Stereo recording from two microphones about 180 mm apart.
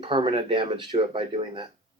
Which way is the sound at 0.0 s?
30° right (ahead or behind).